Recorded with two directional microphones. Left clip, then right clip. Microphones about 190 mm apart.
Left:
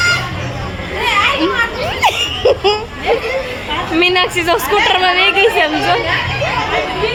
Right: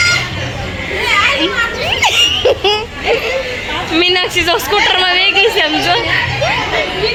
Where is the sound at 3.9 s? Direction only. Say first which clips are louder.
Right 1 dB; centre (ahead or behind).